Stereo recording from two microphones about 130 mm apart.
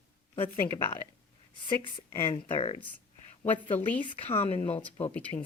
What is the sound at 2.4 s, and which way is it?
Speech, 50° left (ahead or behind).